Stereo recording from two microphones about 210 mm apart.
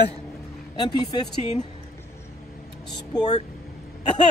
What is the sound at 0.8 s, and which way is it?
Speech, 20° left (ahead or behind).